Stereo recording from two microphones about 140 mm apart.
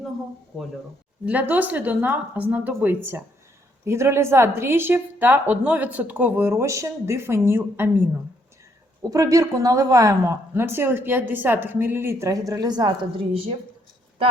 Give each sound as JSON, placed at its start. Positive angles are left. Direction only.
{"t": 1.2, "sound": "a woman's voice", "side_deg": -10}
{"t": 9.0, "sound": "speech", "side_deg": -25}